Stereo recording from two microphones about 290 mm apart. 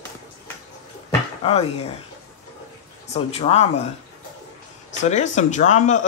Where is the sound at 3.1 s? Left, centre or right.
Left.